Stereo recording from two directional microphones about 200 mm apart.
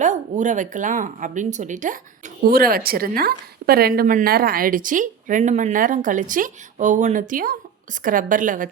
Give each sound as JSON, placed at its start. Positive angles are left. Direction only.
{"t": 0.0, "sound": "speech", "side_deg": -35}